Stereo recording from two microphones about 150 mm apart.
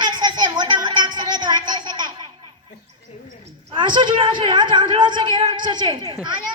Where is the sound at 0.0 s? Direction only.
30° right (ahead or behind).